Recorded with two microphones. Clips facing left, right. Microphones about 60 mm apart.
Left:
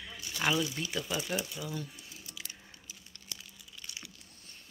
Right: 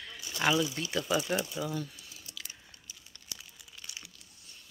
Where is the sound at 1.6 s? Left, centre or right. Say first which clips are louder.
Right 5 dB; centre.